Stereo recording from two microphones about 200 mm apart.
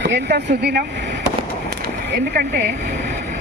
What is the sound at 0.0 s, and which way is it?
Speech, 55° right (ahead or behind).